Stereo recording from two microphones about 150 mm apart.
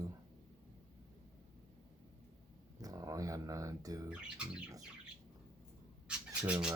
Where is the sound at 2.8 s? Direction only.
25° right (ahead or behind).